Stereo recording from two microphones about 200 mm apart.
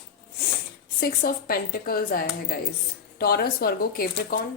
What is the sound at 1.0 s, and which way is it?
A woman's voice, 50° left (ahead or behind).